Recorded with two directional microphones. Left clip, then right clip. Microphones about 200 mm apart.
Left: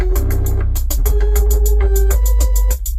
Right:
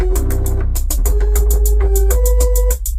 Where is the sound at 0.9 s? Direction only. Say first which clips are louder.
Left 1 dB; 65° right (ahead or behind).